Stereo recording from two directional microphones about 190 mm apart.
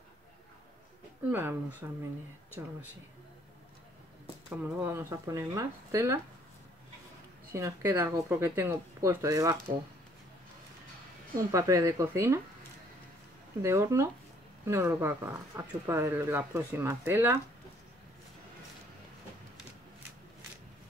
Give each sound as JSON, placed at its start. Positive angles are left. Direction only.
{"t": 1.3, "sound": "speech", "side_deg": -10}
{"t": 4.6, "sound": "speech", "side_deg": -10}
{"t": 7.5, "sound": "speech", "side_deg": -15}
{"t": 11.3, "sound": "speech", "side_deg": -15}
{"t": 13.6, "sound": "speech", "side_deg": -15}